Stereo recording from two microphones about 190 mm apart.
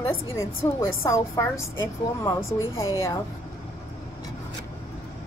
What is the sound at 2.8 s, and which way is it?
Speech, 15° left (ahead or behind).